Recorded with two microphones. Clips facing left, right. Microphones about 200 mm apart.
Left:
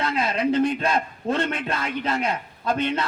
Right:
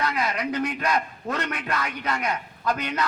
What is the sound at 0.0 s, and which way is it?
A man's voice, 25° left (ahead or behind).